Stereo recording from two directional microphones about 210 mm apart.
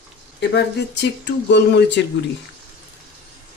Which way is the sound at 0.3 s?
55° left (ahead or behind).